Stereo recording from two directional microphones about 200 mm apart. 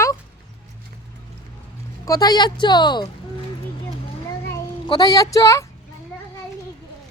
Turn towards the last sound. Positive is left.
turn(degrees=15)  # may be behind; listen again after turning